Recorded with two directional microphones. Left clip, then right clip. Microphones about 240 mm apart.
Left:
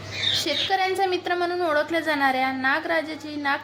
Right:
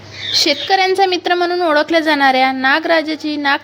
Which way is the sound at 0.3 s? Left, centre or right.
Right.